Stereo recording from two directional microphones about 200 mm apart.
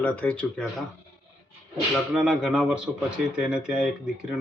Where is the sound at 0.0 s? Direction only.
5° left (ahead or behind).